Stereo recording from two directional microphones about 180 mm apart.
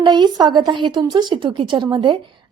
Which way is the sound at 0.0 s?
25° right (ahead or behind).